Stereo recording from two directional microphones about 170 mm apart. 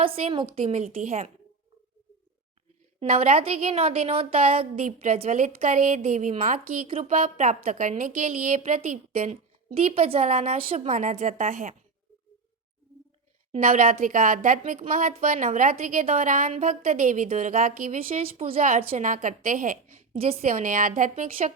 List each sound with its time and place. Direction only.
0.0 s a woman's voice: 35° right (ahead or behind)
3.0 s a woman's voice: 35° right (ahead or behind)
6.8 s a woman's voice: 35° right (ahead or behind)
7.1 s a woman's voice: 45° right (ahead or behind)
13.5 s a woman's voice: 50° right (ahead or behind); by 18.6 s 35° right (ahead or behind)
18.9 s a woman's voice: 50° right (ahead or behind)